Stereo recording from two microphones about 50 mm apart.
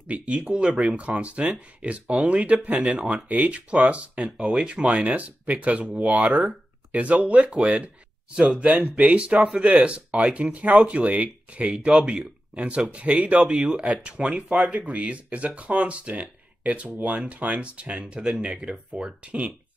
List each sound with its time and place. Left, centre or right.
0.1 s speech: right